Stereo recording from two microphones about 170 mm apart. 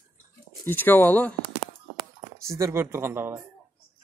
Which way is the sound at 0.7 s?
10° left (ahead or behind).